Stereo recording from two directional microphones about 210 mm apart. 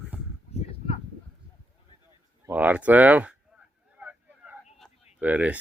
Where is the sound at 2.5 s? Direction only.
5° right (ahead or behind).